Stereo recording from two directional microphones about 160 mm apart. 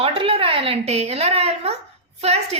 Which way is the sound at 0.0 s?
35° right (ahead or behind).